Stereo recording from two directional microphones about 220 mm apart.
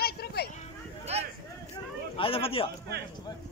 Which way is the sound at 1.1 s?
30° right (ahead or behind).